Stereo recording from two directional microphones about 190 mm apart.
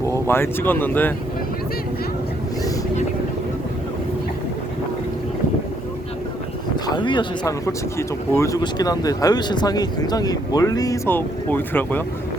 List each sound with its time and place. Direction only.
0.0 s speech: 15° left (ahead or behind)
6.8 s speech: 25° left (ahead or behind)